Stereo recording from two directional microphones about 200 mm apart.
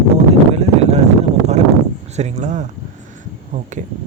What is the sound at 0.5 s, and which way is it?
Speech, 30° right (ahead or behind).